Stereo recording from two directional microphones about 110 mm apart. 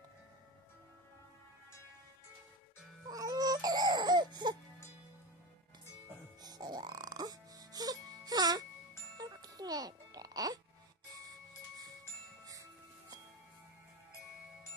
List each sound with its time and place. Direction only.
3.1 s music: 35° right (ahead or behind)
6.4 s music: 40° right (ahead or behind)